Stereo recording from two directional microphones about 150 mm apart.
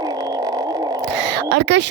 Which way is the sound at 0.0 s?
25° right (ahead or behind).